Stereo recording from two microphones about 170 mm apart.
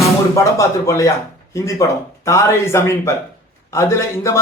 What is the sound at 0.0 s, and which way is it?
Speech, 20° left (ahead or behind).